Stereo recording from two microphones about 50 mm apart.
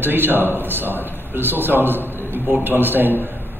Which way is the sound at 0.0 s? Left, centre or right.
Right.